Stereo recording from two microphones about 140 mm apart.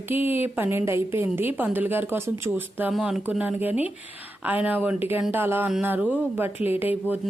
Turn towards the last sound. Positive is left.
turn(degrees=-10)  # may be behind; listen again after turning